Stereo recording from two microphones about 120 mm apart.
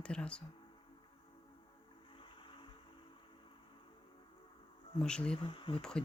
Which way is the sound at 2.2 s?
45° left (ahead or behind).